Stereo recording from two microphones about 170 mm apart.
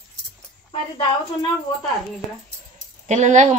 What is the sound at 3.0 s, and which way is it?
Speech, 45° right (ahead or behind).